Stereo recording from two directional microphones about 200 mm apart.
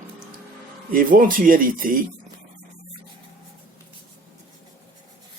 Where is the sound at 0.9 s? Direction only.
45° right (ahead or behind).